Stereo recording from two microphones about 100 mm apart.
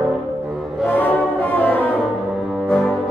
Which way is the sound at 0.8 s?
20° left (ahead or behind).